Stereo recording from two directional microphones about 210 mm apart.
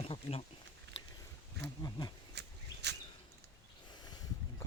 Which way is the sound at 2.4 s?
55° right (ahead or behind).